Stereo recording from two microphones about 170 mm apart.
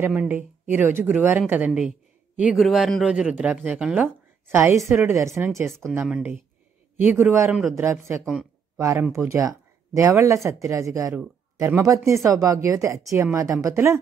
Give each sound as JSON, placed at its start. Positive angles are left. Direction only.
{"t": 0.0, "sound": "speech", "side_deg": -10}